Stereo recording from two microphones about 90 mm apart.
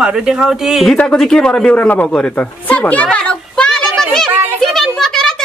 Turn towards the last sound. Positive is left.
turn(degrees=5)  # may be behind; listen again after turning